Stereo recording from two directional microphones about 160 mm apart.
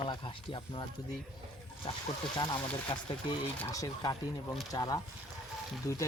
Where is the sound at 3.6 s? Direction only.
20° left (ahead or behind).